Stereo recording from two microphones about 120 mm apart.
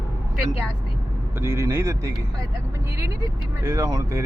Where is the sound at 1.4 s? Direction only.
20° right (ahead or behind).